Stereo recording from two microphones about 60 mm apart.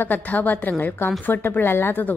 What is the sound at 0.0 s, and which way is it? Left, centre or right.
Speech, left.